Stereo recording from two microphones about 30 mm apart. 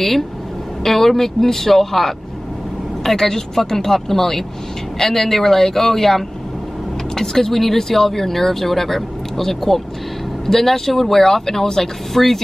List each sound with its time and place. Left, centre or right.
0.8 s speech: centre